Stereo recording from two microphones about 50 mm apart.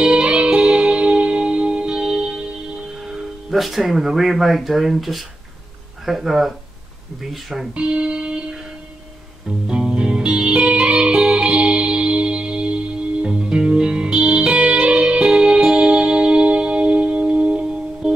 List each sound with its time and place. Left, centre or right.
0.0 s music: centre
3.4 s speech: centre
7.7 s music: right
9.7 s music: centre